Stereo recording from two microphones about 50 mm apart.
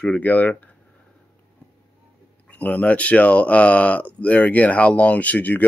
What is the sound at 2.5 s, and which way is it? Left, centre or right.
Speech, left.